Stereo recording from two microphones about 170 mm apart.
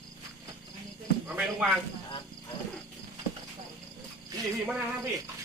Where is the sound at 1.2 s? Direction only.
5° right (ahead or behind).